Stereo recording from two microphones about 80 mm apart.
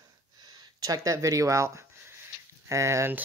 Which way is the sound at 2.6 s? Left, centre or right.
Right.